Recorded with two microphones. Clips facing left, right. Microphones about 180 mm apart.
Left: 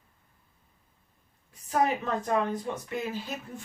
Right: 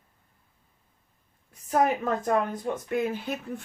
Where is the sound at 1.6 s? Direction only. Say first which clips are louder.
Right 3 dB; 50° right (ahead or behind).